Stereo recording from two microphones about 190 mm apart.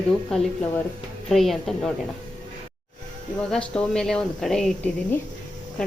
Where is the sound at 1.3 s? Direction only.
Centre (ahead or behind).